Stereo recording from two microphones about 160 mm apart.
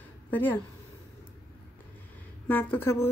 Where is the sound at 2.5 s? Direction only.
10° left (ahead or behind).